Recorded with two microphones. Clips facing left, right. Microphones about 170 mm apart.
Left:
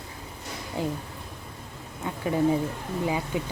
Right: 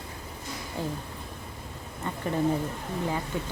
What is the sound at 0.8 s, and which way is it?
Speech, 15° left (ahead or behind).